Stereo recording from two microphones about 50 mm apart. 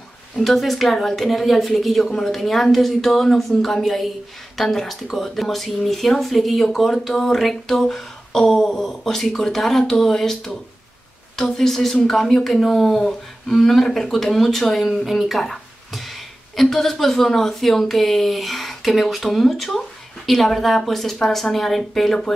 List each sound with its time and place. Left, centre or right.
0.4 s speech: centre